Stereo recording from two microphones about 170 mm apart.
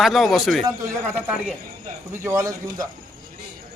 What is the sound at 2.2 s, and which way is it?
Speech, 20° right (ahead or behind).